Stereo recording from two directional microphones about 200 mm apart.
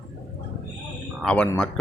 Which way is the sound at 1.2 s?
5° left (ahead or behind).